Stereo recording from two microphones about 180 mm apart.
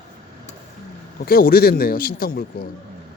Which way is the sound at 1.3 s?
55° left (ahead or behind).